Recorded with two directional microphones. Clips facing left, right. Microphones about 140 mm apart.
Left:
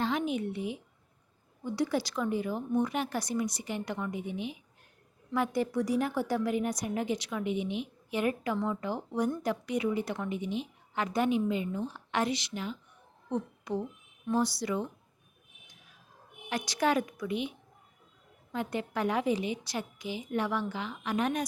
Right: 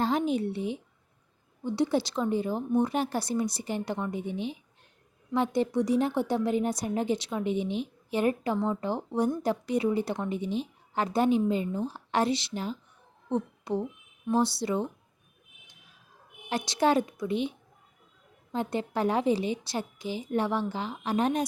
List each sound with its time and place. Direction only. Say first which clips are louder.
0.0 s a woman's voice: right 4 dB; 35° right (ahead or behind)
16.5 s a woman's voice: right 4 dB; 25° right (ahead or behind)
18.5 s a woman's voice: right 3 dB; 30° right (ahead or behind)